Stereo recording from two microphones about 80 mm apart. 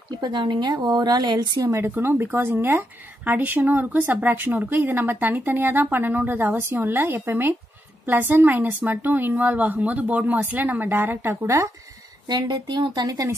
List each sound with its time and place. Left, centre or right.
0.1 s speech: right
1.9 s speech: right
12.3 s speech: right